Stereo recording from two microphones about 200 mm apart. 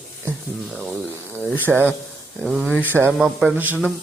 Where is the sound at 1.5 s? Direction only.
10° right (ahead or behind).